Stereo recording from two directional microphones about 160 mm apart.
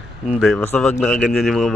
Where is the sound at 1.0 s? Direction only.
Centre (ahead or behind).